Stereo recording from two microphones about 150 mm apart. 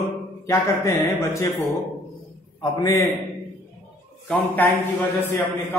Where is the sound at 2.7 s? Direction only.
20° left (ahead or behind).